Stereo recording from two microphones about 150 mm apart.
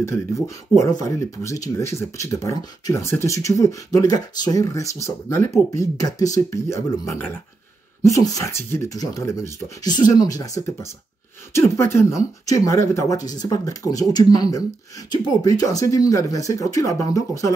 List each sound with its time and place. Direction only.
0.0 s speech: 20° left (ahead or behind)